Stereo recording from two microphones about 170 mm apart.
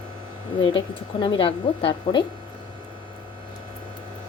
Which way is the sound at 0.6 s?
30° left (ahead or behind).